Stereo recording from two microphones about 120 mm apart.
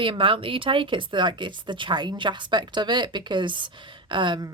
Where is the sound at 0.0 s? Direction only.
45° right (ahead or behind).